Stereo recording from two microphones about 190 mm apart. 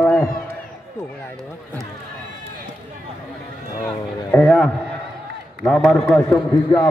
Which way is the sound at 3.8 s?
10° left (ahead or behind).